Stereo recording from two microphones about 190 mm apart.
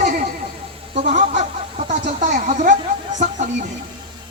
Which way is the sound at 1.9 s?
40° right (ahead or behind).